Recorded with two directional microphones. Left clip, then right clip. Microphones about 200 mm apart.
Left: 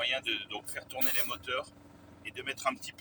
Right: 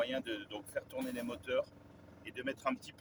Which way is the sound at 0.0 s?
20° right (ahead or behind).